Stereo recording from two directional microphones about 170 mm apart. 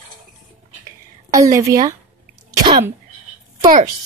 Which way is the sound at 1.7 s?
20° right (ahead or behind).